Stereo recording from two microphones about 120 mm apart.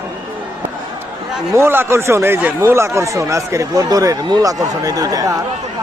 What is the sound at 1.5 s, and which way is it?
Speech, 20° right (ahead or behind).